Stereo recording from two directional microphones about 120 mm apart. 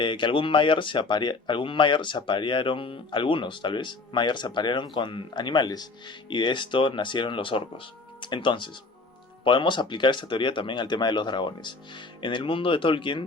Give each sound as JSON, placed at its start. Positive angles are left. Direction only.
{"t": 0.0, "sound": "speech", "side_deg": 45}